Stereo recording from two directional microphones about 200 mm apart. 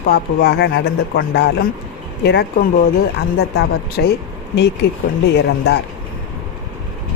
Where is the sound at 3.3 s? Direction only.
50° left (ahead or behind).